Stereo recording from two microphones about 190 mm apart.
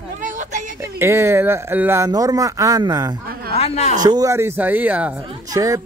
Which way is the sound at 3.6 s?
35° left (ahead or behind).